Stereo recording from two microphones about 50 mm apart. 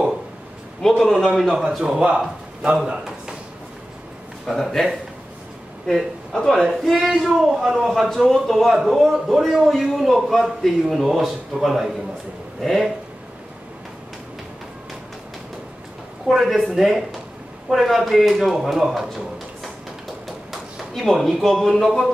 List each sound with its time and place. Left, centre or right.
0.8 s a man's voice: centre
1.5 s a man's voice: centre
4.5 s a man's voice: centre
16.3 s a man's voice: centre
20.2 s a sound: centre